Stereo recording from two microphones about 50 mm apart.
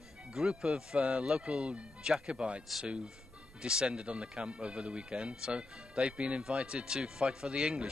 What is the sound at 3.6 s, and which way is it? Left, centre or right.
Speech, centre.